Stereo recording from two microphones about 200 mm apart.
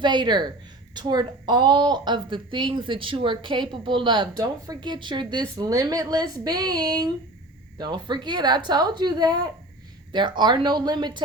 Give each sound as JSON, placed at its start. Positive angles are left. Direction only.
{"t": 0.0, "sound": "a woman's voice", "side_deg": -20}